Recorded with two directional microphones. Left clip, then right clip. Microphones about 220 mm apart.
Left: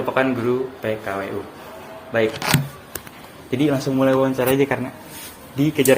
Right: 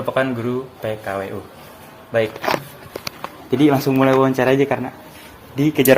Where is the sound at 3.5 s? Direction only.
40° right (ahead or behind).